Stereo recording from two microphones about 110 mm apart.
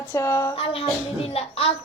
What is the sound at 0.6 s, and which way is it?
Speech, 65° left (ahead or behind).